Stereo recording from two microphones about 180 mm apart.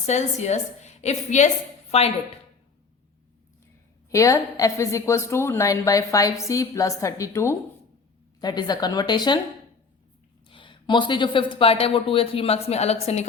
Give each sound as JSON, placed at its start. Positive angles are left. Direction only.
{"t": 0.0, "sound": "speech", "side_deg": 40}
{"t": 4.1, "sound": "a woman's voice", "side_deg": 15}
{"t": 10.4, "sound": "speech", "side_deg": 30}